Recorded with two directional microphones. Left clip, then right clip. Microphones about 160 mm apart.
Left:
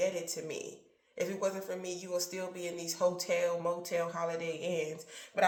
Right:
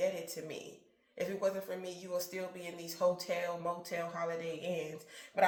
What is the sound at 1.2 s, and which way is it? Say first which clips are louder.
Speech: left 1 dB; 25° left (ahead or behind).